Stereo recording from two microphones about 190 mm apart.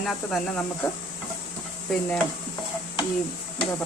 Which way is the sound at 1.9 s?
Centre (ahead or behind).